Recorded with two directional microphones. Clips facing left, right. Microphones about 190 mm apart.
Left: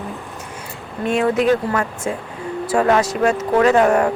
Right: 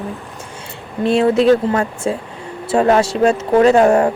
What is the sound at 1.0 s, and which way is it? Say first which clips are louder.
Speech: right 4 dB; 30° right (ahead or behind).